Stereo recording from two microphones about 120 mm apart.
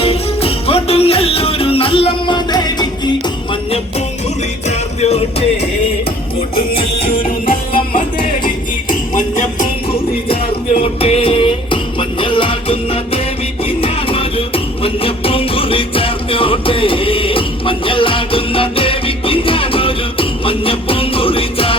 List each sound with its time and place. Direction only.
0.0 s music: 55° left (ahead or behind); by 3.1 s 35° left (ahead or behind)
4.7 s music: 65° left (ahead or behind)
6.6 s music: 50° left (ahead or behind)
9.1 s music: 90° left
11.0 s music: 55° left (ahead or behind)